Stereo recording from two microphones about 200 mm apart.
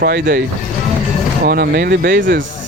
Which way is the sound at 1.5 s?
50° right (ahead or behind).